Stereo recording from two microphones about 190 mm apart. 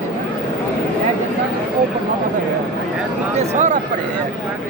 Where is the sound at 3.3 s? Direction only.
40° right (ahead or behind).